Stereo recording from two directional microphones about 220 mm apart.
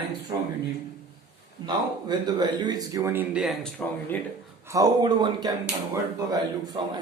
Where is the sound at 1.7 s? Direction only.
20° right (ahead or behind); by 4.2 s 5° left (ahead or behind).